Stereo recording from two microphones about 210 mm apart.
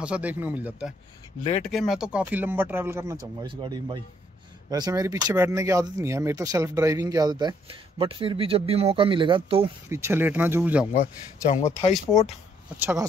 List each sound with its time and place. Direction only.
0.0 s speech: 5° right (ahead or behind); by 9.7 s 25° right (ahead or behind)
9.8 s speech: 15° right (ahead or behind)
10.9 s speech: 35° left (ahead or behind)